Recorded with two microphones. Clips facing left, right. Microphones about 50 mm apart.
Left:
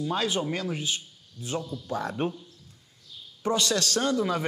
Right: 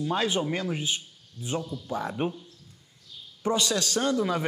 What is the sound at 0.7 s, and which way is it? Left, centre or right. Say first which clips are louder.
Speech: right 1 dB; right.